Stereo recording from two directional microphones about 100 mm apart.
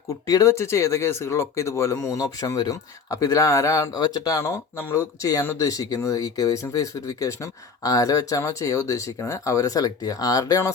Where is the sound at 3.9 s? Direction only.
40° left (ahead or behind).